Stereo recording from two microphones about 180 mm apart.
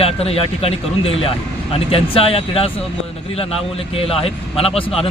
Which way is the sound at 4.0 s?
30° left (ahead or behind).